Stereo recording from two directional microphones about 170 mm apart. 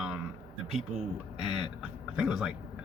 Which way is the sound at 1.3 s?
Centre (ahead or behind).